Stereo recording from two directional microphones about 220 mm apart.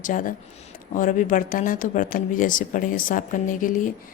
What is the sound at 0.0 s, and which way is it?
Speech, 35° left (ahead or behind).